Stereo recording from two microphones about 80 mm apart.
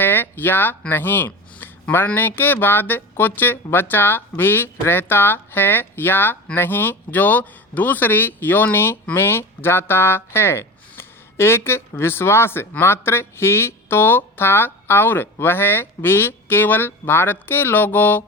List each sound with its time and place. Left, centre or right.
0.0 s speech: left